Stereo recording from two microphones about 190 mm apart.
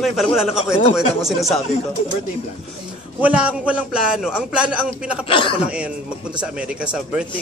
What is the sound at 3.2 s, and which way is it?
A man's voice, 5° right (ahead or behind).